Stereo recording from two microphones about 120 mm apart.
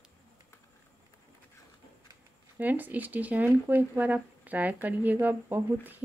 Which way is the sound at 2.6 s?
15° right (ahead or behind).